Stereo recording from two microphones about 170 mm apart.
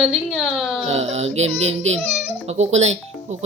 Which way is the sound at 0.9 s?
40° right (ahead or behind).